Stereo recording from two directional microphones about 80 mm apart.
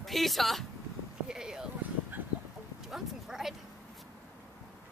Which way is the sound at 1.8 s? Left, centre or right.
Right.